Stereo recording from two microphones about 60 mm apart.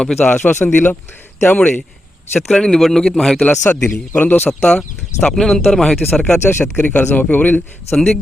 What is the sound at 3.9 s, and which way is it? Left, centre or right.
Speech, left.